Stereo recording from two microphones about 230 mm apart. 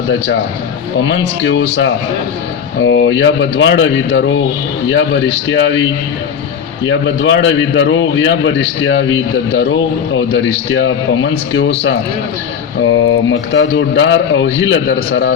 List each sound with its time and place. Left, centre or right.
1.5 s a man's voice: left
6.8 s a man's voice: left
12.9 s a man's voice: left